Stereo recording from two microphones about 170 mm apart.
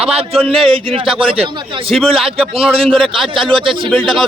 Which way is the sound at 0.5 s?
30° right (ahead or behind).